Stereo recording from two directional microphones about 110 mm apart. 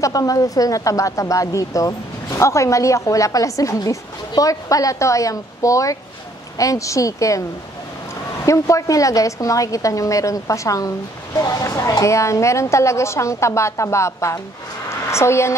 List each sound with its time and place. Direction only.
0.0 s a woman's voice: 30° left (ahead or behind)
8.5 s a woman's voice: 30° left (ahead or behind)